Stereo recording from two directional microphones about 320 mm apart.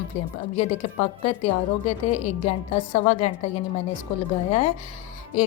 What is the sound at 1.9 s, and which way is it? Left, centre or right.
A woman's voice, left.